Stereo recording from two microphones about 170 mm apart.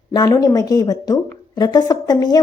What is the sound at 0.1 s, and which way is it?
A woman's voice, 20° left (ahead or behind).